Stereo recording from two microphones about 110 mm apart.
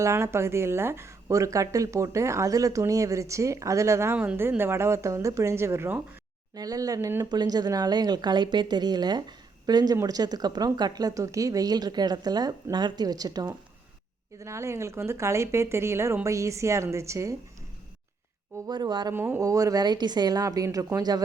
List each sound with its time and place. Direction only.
0.0 s speech: 25° right (ahead or behind)
6.5 s a woman's voice: 35° right (ahead or behind)
18.7 s a woman's voice: 40° right (ahead or behind)
19.1 s speech: 20° right (ahead or behind)
19.4 s a woman's voice: 30° right (ahead or behind)